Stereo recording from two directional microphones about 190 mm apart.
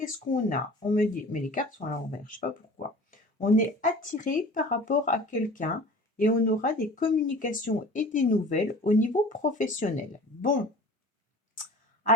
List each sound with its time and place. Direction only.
0.0 s speech: 45° left (ahead or behind)